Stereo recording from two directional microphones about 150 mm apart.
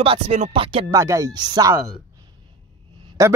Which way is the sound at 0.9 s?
20° right (ahead or behind).